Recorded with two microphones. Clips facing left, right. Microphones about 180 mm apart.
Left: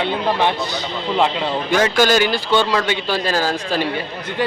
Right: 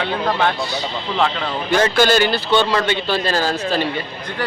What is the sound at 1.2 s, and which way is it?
A man's voice, 15° left (ahead or behind).